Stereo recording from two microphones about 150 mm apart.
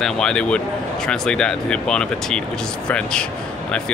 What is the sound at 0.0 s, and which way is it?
A man's voice, 5° left (ahead or behind).